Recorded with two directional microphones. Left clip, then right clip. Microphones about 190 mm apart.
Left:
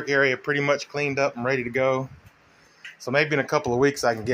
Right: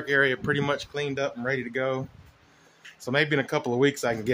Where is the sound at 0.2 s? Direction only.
15° right (ahead or behind).